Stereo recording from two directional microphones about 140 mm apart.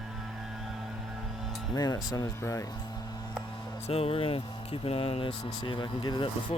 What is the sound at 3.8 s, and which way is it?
Speech, 40° left (ahead or behind).